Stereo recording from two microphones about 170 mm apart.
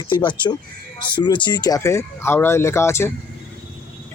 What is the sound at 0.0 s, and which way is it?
Speech, 30° left (ahead or behind).